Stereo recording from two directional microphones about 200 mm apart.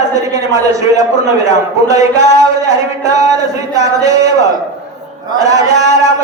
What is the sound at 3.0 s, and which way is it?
Speech, 15° right (ahead or behind).